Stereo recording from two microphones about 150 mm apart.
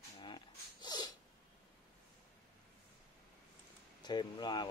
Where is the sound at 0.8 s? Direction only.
25° left (ahead or behind).